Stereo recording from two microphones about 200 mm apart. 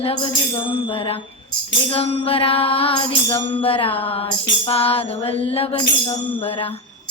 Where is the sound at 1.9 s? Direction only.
30° left (ahead or behind).